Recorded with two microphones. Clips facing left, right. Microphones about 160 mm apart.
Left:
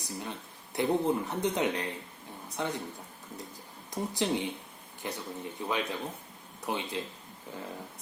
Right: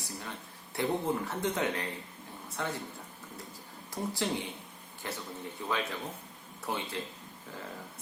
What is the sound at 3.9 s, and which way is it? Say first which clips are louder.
Speech: left 3 dB; 20° left (ahead or behind).